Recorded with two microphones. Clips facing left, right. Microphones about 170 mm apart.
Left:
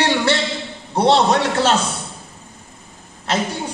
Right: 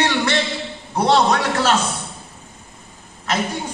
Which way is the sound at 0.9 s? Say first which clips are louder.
Left 2 dB; 30° left (ahead or behind).